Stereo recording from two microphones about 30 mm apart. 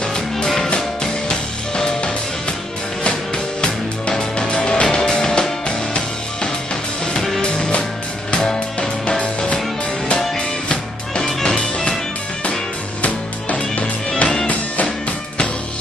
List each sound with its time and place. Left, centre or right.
4.1 s music: left
4.9 s music: left
8.3 s music: left
11.4 s music: left
13.0 s music: left